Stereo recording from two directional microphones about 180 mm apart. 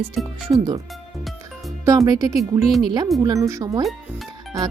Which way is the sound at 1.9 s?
20° right (ahead or behind).